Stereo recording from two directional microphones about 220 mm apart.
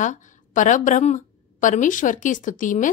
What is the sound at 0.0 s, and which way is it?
A woman's voice, 35° left (ahead or behind).